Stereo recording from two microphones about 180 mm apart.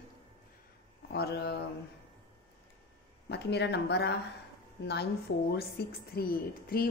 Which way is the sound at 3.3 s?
70° left (ahead or behind).